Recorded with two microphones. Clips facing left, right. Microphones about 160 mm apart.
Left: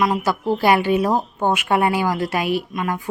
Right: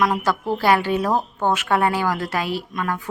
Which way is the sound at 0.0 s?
10° left (ahead or behind).